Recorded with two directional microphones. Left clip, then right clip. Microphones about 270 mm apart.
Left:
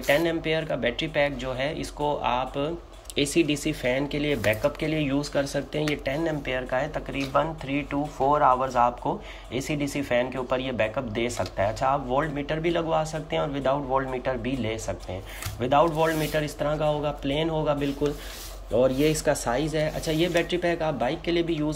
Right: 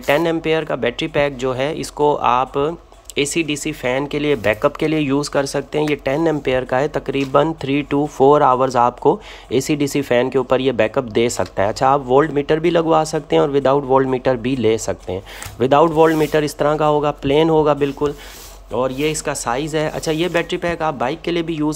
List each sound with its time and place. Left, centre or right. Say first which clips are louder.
0.0 s speech: right 7 dB; centre